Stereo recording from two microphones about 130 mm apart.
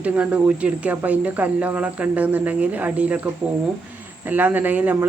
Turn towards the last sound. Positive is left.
turn(degrees=-15)  # may be behind; listen again after turning